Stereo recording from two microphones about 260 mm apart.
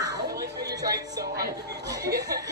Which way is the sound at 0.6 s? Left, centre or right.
Centre.